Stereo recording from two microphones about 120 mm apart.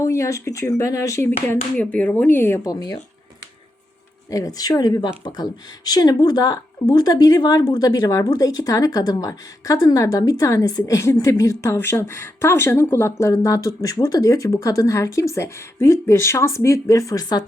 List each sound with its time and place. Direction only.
0.0 s a woman's voice: 25° left (ahead or behind)
1.7 s speech: 10° left (ahead or behind)
2.7 s speech: 30° left (ahead or behind)
4.3 s a woman's voice: 30° left (ahead or behind)